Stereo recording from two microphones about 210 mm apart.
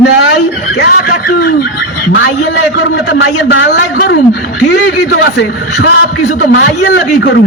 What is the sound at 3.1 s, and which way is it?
Speech, 60° left (ahead or behind).